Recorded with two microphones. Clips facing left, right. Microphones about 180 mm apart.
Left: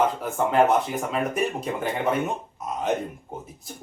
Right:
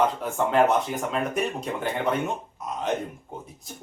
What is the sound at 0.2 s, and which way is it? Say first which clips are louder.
Speech: left 1 dB; centre (ahead or behind).